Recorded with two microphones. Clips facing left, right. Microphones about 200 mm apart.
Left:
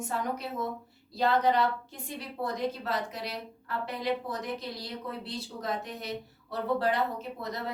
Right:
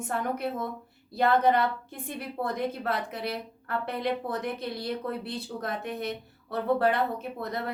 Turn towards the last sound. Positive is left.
turn(degrees=-55)  # may be behind; listen again after turning